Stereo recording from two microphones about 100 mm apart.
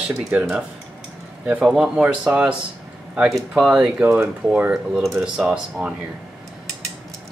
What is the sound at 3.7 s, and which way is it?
Speech, 10° right (ahead or behind).